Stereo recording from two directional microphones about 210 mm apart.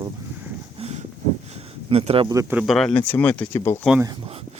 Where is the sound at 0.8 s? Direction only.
30° right (ahead or behind).